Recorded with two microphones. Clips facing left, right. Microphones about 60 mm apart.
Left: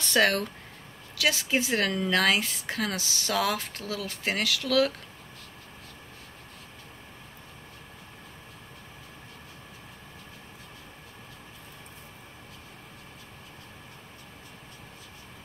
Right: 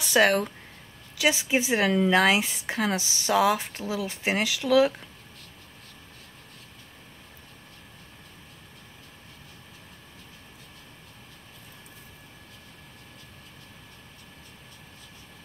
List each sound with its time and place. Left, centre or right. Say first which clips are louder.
0.0 s speech: right 3 dB; centre